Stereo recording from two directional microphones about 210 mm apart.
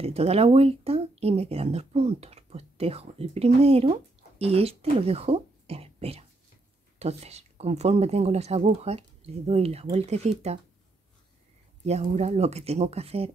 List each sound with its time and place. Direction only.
0.0 s speech: 30° right (ahead or behind)
11.8 s speech: 30° right (ahead or behind)